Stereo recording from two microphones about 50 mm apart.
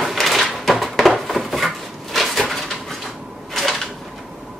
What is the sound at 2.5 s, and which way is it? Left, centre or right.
Bird, centre.